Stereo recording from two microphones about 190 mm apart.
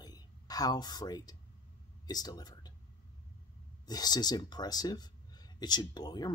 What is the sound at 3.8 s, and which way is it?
Speech, 20° left (ahead or behind).